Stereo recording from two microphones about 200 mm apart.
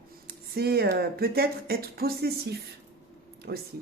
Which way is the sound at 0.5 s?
50° right (ahead or behind).